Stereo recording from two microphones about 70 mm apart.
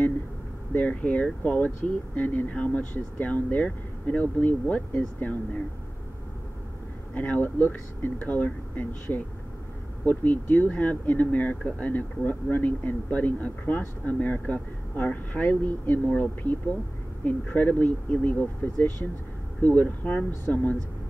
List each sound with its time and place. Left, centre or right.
0.7 s speech: left
7.2 s speech: left